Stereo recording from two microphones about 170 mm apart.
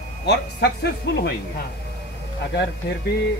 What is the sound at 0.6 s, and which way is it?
Speech, 70° left (ahead or behind).